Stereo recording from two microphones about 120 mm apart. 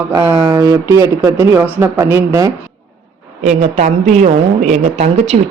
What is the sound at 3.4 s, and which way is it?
A woman's voice, 75° right (ahead or behind).